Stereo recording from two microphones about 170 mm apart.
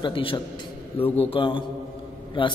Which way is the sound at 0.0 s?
30° left (ahead or behind).